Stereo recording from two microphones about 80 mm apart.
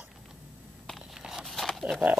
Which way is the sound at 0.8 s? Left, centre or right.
Centre.